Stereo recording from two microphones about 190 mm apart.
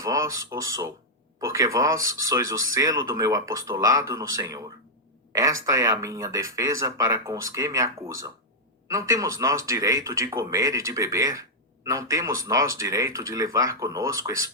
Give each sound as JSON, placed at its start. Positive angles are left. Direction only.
{"t": 0.0, "sound": "a woman's voice", "side_deg": -15}